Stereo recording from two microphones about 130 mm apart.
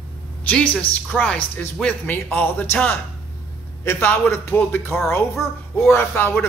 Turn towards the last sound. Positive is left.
turn(degrees=15)  # may be behind; listen again after turning